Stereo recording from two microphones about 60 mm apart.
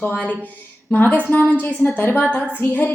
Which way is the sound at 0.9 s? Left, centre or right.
Left.